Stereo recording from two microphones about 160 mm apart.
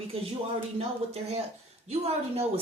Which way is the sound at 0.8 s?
40° right (ahead or behind).